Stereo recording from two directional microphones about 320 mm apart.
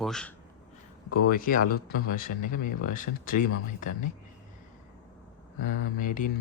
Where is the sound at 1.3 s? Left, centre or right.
Left.